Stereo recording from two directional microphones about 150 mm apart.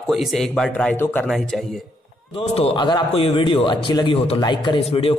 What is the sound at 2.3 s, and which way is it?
A man's voice, 40° left (ahead or behind).